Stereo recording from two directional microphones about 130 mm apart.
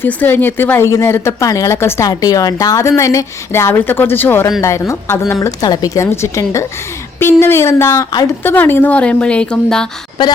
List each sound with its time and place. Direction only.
0.0 s a woman's voice: 15° left (ahead or behind)